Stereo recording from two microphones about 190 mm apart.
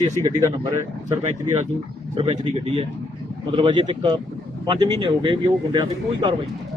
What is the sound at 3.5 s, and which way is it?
Speech, 25° right (ahead or behind).